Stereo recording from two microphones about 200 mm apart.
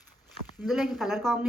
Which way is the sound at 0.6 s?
Centre (ahead or behind).